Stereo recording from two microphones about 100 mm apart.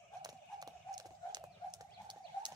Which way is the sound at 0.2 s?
40° right (ahead or behind).